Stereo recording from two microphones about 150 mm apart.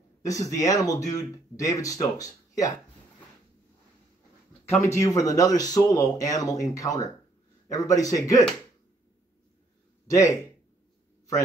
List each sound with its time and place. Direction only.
0.2 s speech: 20° left (ahead or behind)
4.6 s speech: 20° left (ahead or behind)
10.0 s speech: 20° left (ahead or behind)